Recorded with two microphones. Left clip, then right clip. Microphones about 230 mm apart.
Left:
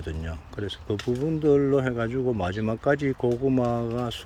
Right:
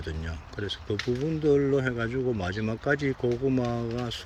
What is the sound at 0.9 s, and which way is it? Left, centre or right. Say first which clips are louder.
Speech: left 1 dB; left.